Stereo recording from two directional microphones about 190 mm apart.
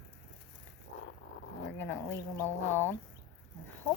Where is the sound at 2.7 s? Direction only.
10° left (ahead or behind).